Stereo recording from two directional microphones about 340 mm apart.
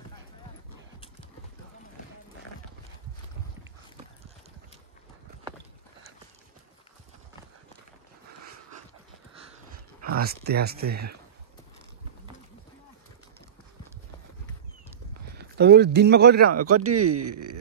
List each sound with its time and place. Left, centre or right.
10.1 s speech: right
15.3 s speech: right
16.4 s speech: right